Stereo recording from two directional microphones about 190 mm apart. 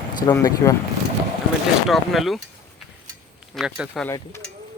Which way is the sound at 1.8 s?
Centre (ahead or behind).